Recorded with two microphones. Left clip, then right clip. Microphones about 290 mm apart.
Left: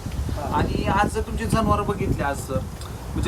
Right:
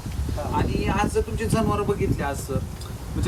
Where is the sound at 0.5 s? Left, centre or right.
Centre.